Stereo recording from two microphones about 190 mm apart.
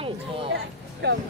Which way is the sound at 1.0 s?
60° right (ahead or behind).